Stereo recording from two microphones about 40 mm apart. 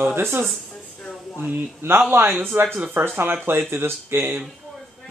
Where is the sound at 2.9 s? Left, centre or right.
Right.